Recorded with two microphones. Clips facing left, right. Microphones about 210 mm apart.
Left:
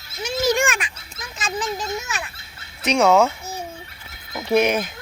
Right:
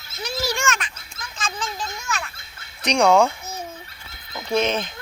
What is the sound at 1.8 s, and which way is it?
Speech, 20° left (ahead or behind).